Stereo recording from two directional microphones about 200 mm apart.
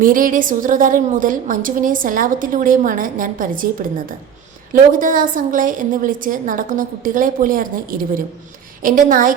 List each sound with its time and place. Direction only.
0.0 s a woman's voice: 40° right (ahead or behind)